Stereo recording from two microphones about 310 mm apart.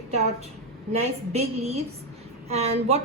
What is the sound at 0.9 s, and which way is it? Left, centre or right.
A woman's voice, centre.